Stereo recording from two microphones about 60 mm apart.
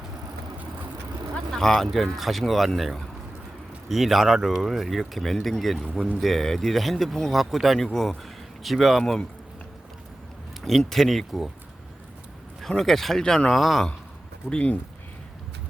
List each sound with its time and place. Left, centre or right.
1.5 s speech: centre
10.6 s speech: centre
12.6 s speech: centre
14.5 s speech: left